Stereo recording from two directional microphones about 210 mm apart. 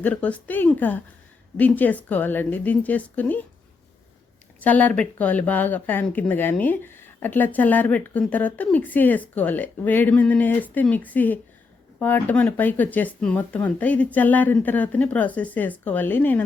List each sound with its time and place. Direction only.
0.0 s speech: 5° left (ahead or behind)
4.6 s speech: 5° left (ahead or behind)